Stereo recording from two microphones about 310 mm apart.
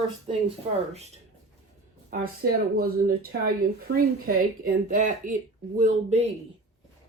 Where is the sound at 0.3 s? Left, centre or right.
Centre.